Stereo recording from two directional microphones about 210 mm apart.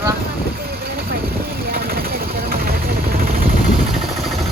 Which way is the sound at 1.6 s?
45° right (ahead or behind).